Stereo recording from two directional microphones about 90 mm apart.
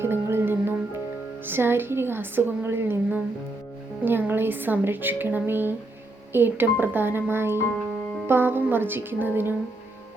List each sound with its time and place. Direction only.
0.0 s music: 25° right (ahead or behind)
1.5 s speech: 25° right (ahead or behind)